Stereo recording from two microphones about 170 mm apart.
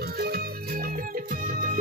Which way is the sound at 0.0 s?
65° right (ahead or behind).